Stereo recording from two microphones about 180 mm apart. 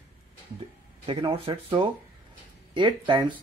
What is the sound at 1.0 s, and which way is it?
Speech, 30° right (ahead or behind).